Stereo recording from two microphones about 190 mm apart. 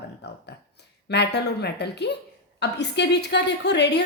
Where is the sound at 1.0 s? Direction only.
60° left (ahead or behind).